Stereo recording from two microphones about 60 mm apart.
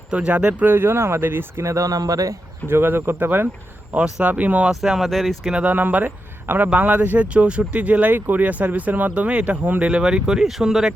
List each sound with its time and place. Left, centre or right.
0.1 s speech: centre
0.7 s speech: right
1.6 s speech: right
2.6 s speech: right
4.7 s speech: centre
5.6 s speech: right; by 10.9 s centre